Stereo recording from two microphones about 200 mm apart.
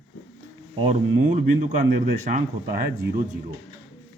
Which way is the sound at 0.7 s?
35° right (ahead or behind).